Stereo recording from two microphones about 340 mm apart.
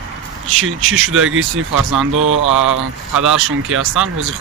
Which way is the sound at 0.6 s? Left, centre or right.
Right.